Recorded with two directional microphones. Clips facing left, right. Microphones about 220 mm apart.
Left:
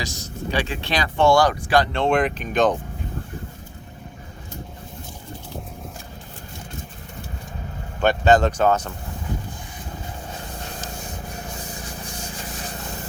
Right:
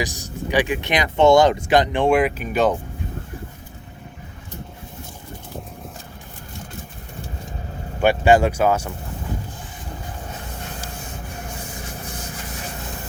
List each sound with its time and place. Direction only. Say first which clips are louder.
0.0 s speech: right 3 dB; 15° right (ahead or behind)
8.0 s speech: right 2 dB; 10° right (ahead or behind)